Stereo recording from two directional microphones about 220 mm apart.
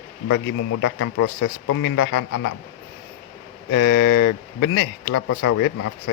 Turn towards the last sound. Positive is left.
turn(degrees=90)